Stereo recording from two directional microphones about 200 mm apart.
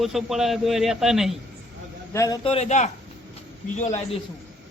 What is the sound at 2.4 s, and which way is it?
A man's voice, 30° left (ahead or behind).